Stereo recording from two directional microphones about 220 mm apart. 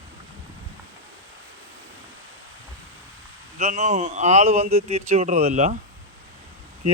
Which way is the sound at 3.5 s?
30° right (ahead or behind).